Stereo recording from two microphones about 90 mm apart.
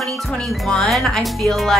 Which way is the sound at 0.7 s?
5° left (ahead or behind).